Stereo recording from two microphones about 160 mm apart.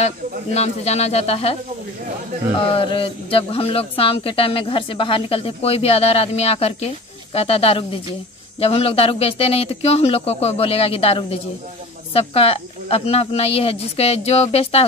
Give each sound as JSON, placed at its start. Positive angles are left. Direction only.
{"t": 0.6, "sound": "a man's voice", "side_deg": 40}
{"t": 2.6, "sound": "a man's voice", "side_deg": 35}